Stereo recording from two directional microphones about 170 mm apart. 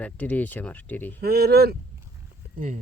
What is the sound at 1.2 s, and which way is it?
Speech, 70° right (ahead or behind).